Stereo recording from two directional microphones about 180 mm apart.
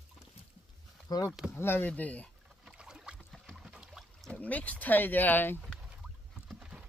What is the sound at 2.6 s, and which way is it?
Rowboat, 5° right (ahead or behind).